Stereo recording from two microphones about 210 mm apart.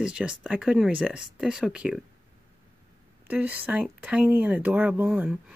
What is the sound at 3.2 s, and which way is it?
Speech, 5° right (ahead or behind).